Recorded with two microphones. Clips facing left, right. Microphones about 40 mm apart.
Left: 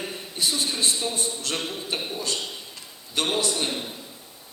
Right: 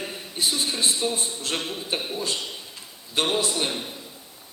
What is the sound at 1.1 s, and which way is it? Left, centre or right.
Speech, right.